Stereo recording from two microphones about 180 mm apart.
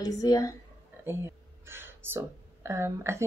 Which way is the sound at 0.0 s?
20° left (ahead or behind).